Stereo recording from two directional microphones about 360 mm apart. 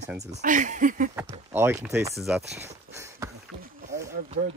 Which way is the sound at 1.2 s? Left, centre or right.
Centre.